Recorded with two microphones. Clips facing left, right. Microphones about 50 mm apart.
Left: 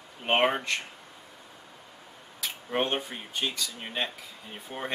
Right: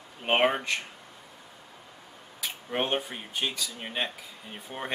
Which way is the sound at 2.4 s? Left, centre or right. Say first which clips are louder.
Left 1 dB; centre.